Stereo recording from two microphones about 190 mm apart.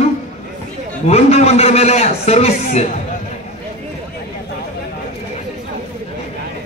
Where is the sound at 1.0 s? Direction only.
35° left (ahead or behind).